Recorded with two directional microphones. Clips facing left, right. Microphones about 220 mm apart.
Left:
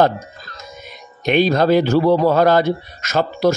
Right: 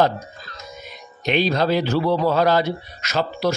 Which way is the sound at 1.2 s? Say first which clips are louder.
Left 5 dB; 50° left (ahead or behind).